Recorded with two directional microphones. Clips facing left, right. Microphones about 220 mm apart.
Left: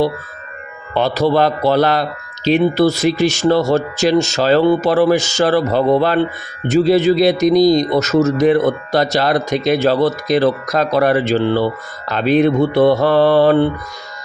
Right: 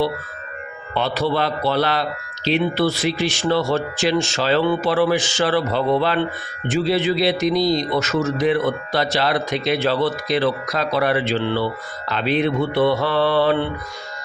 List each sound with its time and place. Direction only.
0.9 s speech: 40° left (ahead or behind)